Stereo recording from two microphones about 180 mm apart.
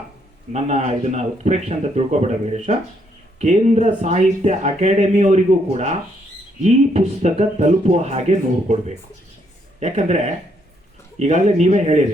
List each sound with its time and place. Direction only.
0.5 s speech: 35° right (ahead or behind)
9.8 s speech: 40° right (ahead or behind)